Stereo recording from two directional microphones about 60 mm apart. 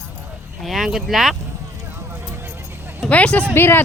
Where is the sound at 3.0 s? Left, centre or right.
Left.